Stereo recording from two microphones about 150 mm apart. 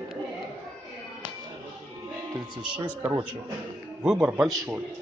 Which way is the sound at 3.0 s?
20° right (ahead or behind).